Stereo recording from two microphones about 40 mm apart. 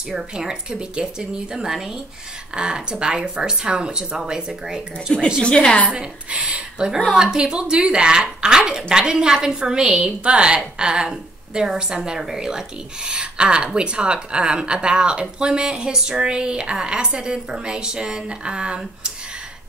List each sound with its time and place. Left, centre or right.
0.1 s a woman's voice: centre
5.4 s a woman's voice: left
5.9 s a sound: right
7.2 s speech: centre